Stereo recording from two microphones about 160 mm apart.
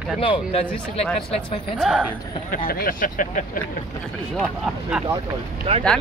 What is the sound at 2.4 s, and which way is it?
Speech, 60° left (ahead or behind).